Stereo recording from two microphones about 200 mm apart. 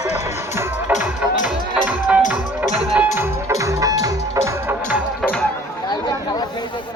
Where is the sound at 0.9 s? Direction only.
40° left (ahead or behind).